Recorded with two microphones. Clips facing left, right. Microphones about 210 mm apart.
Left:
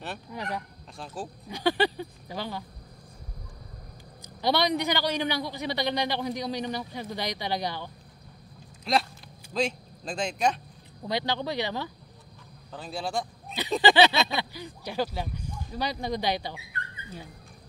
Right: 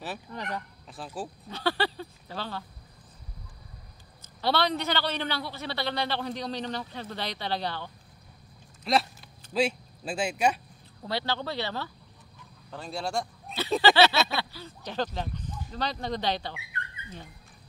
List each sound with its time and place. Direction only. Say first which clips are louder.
0.3 s a man's voice: left 4 dB; 10° left (ahead or behind)
0.9 s speech: right 1 dB; 5° right (ahead or behind)
1.5 s a man's voice: left 4 dB; 15° left (ahead or behind)
4.4 s a man's voice: left 2 dB; 15° left (ahead or behind)
8.9 s speech: even; centre (ahead or behind)
11.1 s a man's voice: left 2 dB; 15° left (ahead or behind)
12.7 s speech: even; centre (ahead or behind)
13.6 s a man's voice: left 1 dB; 15° left (ahead or behind)